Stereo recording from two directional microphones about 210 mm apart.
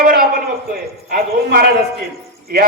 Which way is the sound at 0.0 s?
45° right (ahead or behind).